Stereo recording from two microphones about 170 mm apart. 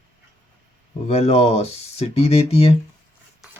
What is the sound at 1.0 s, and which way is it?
Speech, 40° left (ahead or behind).